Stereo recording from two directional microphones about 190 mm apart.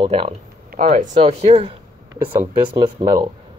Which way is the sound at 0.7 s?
40° right (ahead or behind).